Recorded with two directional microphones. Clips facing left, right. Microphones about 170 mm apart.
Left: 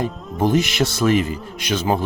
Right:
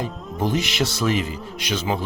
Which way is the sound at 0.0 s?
50° left (ahead or behind).